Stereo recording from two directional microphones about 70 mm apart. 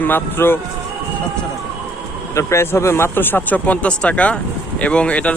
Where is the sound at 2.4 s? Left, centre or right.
Left.